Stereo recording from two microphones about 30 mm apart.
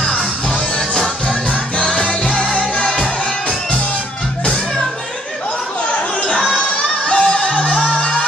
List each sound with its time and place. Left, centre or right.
1.8 s music: left
7.1 s music: left